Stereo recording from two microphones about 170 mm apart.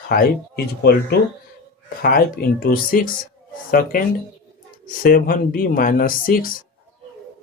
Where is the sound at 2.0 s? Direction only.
60° left (ahead or behind).